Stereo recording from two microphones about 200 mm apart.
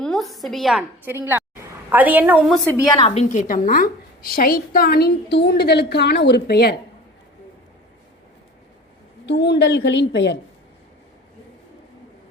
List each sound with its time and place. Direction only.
0.0 s a woman's voice: centre (ahead or behind)
2.6 s a woman's voice: 15° left (ahead or behind)
3.0 s a woman's voice: 35° left (ahead or behind); by 6.7 s 55° left (ahead or behind)
9.2 s a woman's voice: 60° left (ahead or behind)